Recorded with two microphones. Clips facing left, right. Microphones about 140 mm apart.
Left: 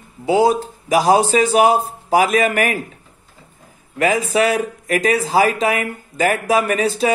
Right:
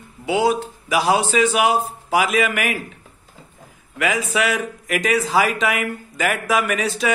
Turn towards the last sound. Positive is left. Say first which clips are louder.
# left 4 dB
turn(degrees=35)  # may be behind; listen again after turning